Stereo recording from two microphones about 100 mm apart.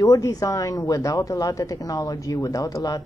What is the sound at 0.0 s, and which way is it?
Speech, 35° left (ahead or behind).